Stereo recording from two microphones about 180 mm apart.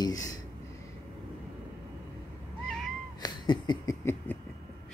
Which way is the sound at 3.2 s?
25° left (ahead or behind).